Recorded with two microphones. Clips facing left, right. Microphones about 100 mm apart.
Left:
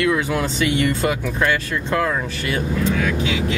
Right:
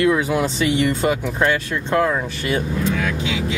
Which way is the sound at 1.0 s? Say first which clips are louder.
Right 1 dB; 35° right (ahead or behind).